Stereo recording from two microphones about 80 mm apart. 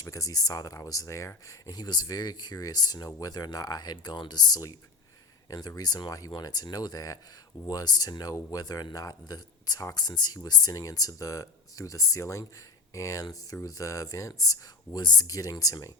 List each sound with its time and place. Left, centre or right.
0.0 s speech: left
1.7 s speech: left